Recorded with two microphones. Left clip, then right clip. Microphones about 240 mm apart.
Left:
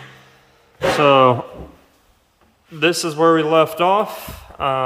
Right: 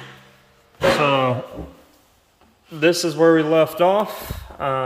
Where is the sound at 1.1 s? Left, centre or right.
Left.